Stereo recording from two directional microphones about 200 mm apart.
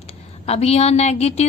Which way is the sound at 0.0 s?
30° left (ahead or behind).